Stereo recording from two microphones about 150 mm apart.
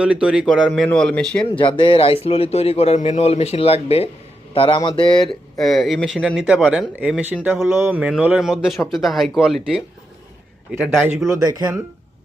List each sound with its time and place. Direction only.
0.0 s speech: 5° right (ahead or behind)
0.4 s speech: 5° left (ahead or behind)
1.5 s speech: 35° left (ahead or behind)
5.5 s speech: centre (ahead or behind)
11.4 s speech: 25° right (ahead or behind)